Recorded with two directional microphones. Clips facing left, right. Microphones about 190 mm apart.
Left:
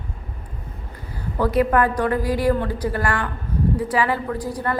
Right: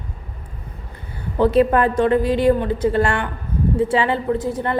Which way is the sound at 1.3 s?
25° right (ahead or behind).